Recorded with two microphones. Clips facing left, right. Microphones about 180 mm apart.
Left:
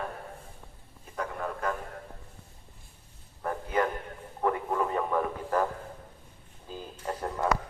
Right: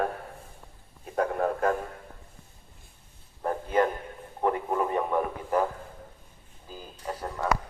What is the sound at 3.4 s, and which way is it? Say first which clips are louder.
Bow-wow: right 4 dB; 25° right (ahead or behind).